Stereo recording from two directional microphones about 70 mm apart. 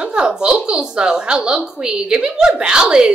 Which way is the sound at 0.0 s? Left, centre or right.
Centre.